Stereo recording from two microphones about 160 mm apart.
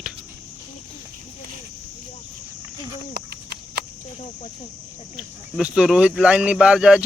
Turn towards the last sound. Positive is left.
turn(degrees=-5)  # may be behind; listen again after turning